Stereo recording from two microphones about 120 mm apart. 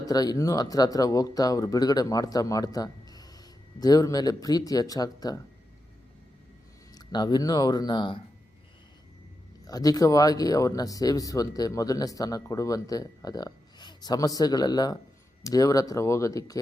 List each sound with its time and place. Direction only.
0.0 s speech: 30° left (ahead or behind)
6.9 s speech: 35° left (ahead or behind)
9.6 s speech: 30° left (ahead or behind)